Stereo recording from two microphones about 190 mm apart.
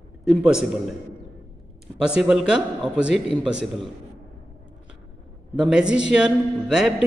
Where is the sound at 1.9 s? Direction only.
5° right (ahead or behind).